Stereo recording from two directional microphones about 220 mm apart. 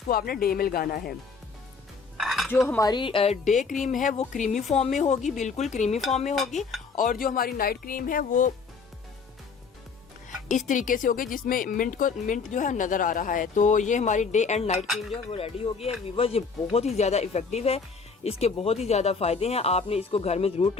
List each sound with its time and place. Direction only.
0.1 s speech: 40° left (ahead or behind)
2.1 s dishes: centre (ahead or behind)
2.5 s speech: 10° left (ahead or behind); by 6.3 s 30° left (ahead or behind)
6.6 s speech: centre (ahead or behind)
6.9 s speech: 35° left (ahead or behind)
10.7 s speech: 35° left (ahead or behind)